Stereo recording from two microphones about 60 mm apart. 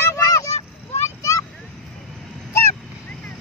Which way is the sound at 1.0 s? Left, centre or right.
Left.